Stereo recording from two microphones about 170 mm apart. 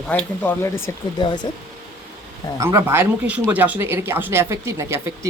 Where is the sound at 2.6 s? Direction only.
15° right (ahead or behind).